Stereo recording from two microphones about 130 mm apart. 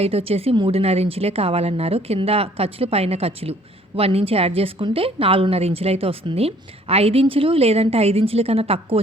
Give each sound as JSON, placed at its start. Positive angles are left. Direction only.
{"t": 0.0, "sound": "a woman's voice", "side_deg": -50}